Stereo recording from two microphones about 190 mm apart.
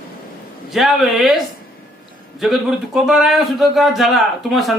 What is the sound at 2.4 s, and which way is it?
Speech, centre (ahead or behind).